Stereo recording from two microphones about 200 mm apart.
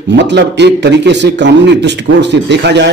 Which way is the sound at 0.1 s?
60° right (ahead or behind).